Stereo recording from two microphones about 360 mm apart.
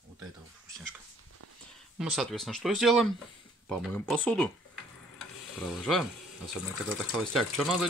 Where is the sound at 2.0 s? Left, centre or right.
Centre.